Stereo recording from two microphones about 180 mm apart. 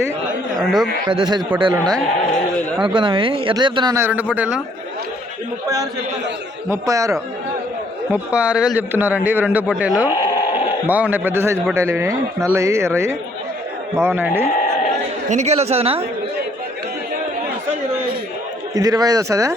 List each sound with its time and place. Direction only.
0.6 s speech: centre (ahead or behind)
1.0 s speech: 25° right (ahead or behind)
2.8 s speech: 25° right (ahead or behind)
4.0 s speech: 10° right (ahead or behind)
5.6 s speech: 20° right (ahead or behind)
8.1 s speech: 5° right (ahead or behind)
10.2 s sheep: 20° left (ahead or behind)
10.8 s speech: 10° right (ahead or behind)
13.9 s speech: 10° right (ahead or behind)
15.3 s speech: 40° right (ahead or behind)
18.7 s speech: 20° right (ahead or behind)